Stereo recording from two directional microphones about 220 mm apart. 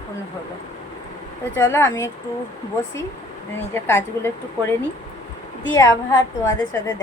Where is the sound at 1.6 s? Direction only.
10° left (ahead or behind).